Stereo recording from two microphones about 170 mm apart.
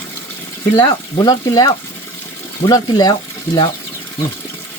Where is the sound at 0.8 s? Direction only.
25° left (ahead or behind).